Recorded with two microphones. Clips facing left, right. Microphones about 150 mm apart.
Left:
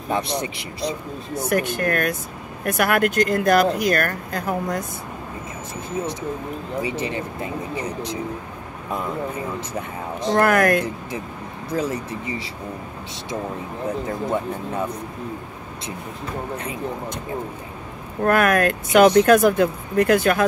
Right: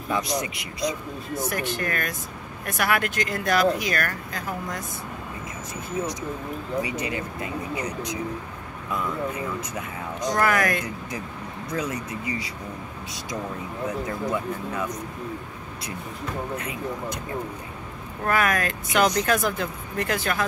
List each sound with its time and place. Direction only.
0.1 s speech: 30° left (ahead or behind)
1.5 s speech: 55° left (ahead or behind)
6.8 s speech: 30° left (ahead or behind)
9.8 s speech: 25° left (ahead or behind)
10.4 s speech: 55° left (ahead or behind)
11.7 s speech: 30° left (ahead or behind)
14.3 s speech: 30° left (ahead or behind)
16.5 s speech: 30° left (ahead or behind)
18.2 s speech: 55° left (ahead or behind)